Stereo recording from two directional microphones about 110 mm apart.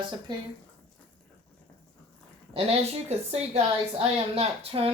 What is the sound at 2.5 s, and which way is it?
Speech, 65° right (ahead or behind).